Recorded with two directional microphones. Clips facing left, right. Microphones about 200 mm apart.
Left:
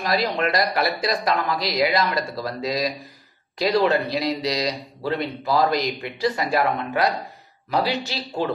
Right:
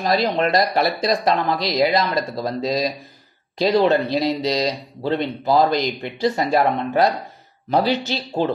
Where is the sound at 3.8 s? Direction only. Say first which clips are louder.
Right 3 dB; 25° right (ahead or behind).